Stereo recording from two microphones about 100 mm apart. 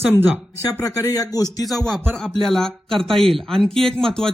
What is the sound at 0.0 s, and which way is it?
Speech, 20° right (ahead or behind).